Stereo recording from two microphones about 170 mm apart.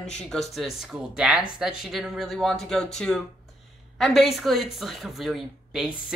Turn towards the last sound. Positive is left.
turn(degrees=-5)  # may be behind; listen again after turning